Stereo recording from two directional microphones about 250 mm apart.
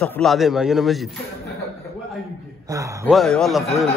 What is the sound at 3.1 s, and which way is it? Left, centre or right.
Speech, centre.